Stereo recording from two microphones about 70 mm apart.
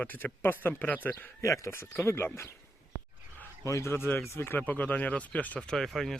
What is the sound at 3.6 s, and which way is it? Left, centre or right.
Speech, left.